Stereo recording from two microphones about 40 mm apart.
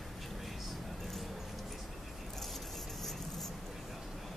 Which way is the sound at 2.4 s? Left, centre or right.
Centre.